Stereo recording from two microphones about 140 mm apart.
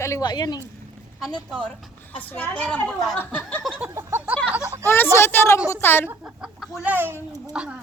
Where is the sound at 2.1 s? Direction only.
10° left (ahead or behind).